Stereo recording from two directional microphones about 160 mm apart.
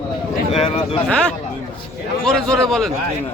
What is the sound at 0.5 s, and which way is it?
Speech, 35° left (ahead or behind).